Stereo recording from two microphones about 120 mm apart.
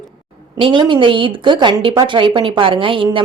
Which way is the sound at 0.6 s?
40° right (ahead or behind).